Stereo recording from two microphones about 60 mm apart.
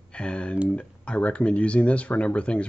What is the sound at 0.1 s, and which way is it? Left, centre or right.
Speech, centre.